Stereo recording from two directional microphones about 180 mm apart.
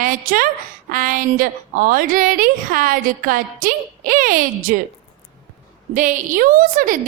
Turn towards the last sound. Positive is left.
turn(degrees=-50)  # may be behind; listen again after turning